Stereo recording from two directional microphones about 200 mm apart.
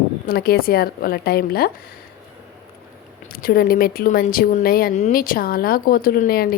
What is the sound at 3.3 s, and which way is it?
Speech, 45° left (ahead or behind).